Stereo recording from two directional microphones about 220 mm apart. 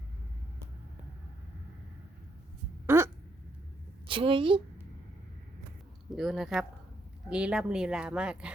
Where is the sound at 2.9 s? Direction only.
10° right (ahead or behind).